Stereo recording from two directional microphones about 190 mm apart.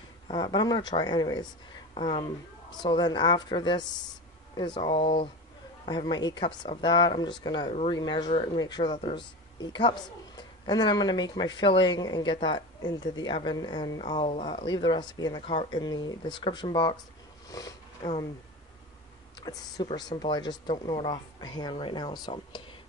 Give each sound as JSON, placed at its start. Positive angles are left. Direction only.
{"t": 0.3, "sound": "speech", "side_deg": 25}
{"t": 17.5, "sound": "sniff", "side_deg": 20}
{"t": 19.4, "sound": "speech", "side_deg": 20}